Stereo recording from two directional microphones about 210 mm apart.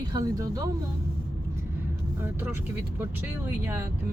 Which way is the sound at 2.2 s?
10° right (ahead or behind).